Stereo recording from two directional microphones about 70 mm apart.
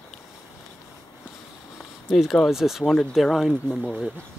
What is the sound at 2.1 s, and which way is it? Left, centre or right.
Speech, centre.